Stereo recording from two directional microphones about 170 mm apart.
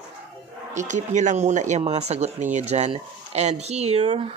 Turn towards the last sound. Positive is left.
turn(degrees=-35)  # may be behind; listen again after turning